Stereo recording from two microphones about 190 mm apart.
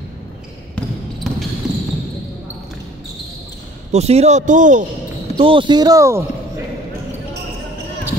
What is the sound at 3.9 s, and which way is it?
Speech, 35° right (ahead or behind).